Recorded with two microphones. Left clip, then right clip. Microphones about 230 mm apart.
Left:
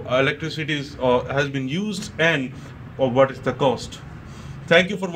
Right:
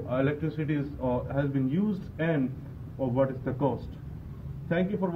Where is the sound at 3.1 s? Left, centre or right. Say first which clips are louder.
Left 9 dB; left.